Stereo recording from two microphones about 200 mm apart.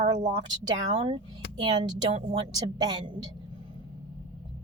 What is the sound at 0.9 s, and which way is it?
A woman's voice, 25° right (ahead or behind).